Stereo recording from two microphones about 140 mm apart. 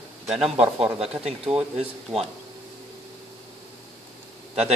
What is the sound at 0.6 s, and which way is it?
Speech, 45° right (ahead or behind).